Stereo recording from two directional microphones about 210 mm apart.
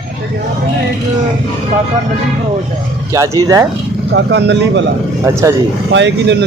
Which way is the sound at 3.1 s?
15° right (ahead or behind).